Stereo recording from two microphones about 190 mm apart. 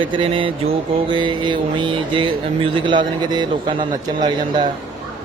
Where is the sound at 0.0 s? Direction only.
25° right (ahead or behind).